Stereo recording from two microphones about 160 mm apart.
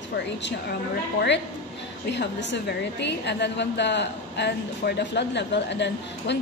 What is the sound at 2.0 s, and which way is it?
A woman's voice, 90° left.